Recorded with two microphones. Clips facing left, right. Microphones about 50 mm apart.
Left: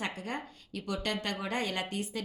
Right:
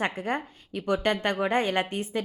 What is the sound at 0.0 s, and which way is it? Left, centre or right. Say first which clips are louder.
A woman's voice: right 8 dB; right.